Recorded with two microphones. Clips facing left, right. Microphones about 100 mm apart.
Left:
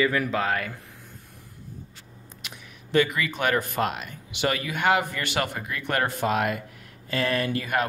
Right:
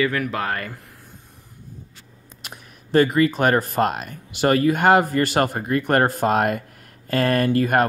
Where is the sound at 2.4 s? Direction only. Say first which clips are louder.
Right 4 dB; 40° right (ahead or behind).